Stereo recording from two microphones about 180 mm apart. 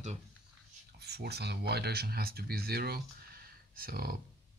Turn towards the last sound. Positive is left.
turn(degrees=-55)  # may be behind; listen again after turning